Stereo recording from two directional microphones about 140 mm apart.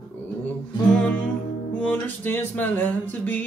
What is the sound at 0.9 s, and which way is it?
Music, 10° left (ahead or behind).